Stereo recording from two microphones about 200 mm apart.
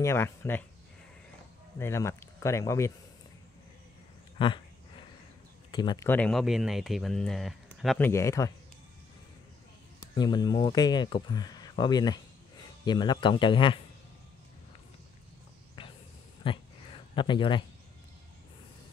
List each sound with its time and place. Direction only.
0.0 s speech: 10° left (ahead or behind)
1.8 s speech: 15° left (ahead or behind)
4.4 s speech: 25° left (ahead or behind)
5.7 s speech: 20° left (ahead or behind)
6.0 s speech: 5° left (ahead or behind)
8.0 s speech: 15° left (ahead or behind)
10.1 s speech: 20° left (ahead or behind)
15.8 s a sound: 25° left (ahead or behind)